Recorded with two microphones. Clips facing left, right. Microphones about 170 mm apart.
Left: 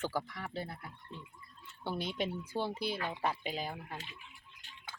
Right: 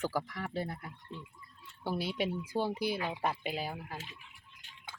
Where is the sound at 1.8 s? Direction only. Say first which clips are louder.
Right 2 dB; 10° right (ahead or behind).